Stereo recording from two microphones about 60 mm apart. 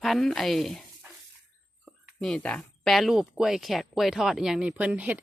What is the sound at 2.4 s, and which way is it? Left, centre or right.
Speech, centre.